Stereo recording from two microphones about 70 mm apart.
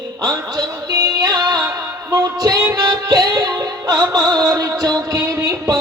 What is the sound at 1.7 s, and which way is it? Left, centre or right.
Music, right.